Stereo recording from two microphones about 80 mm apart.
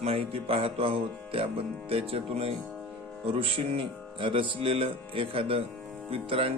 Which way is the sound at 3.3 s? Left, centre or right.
Right.